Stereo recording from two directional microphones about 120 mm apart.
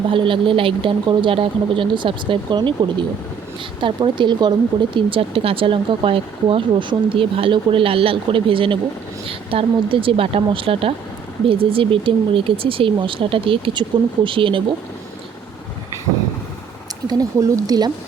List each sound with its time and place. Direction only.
0.1 s speech: 45° right (ahead or behind)
3.8 s speech: 45° right (ahead or behind)
17.1 s speech: 30° right (ahead or behind)